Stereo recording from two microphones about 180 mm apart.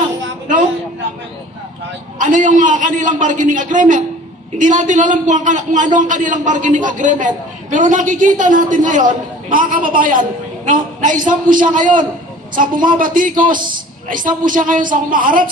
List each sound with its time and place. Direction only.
2.1 s a man's voice: 45° right (ahead or behind)